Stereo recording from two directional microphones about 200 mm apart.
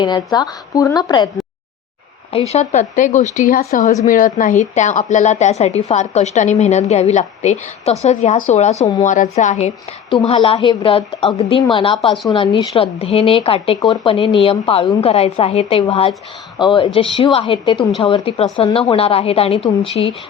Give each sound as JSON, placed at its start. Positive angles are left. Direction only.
{"t": 0.0, "sound": "a woman's voice", "side_deg": 20}
{"t": 2.5, "sound": "a woman's voice", "side_deg": 35}